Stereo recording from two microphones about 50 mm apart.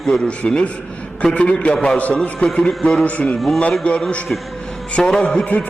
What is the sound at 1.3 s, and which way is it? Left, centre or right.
A man's voice, left.